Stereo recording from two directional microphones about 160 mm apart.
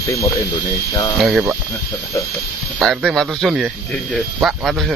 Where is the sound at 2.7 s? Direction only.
Centre (ahead or behind).